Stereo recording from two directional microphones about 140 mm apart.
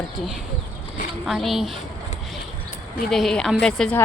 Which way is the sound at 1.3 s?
Centre (ahead or behind).